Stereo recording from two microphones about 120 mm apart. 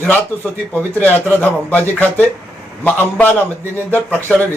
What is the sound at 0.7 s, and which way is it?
Speech, 15° left (ahead or behind).